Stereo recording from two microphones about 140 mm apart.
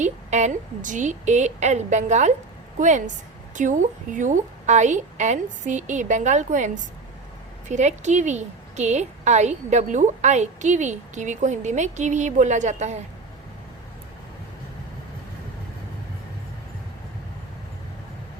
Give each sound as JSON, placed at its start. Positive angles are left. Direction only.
{"t": 0.0, "sound": "a woman's voice", "side_deg": -55}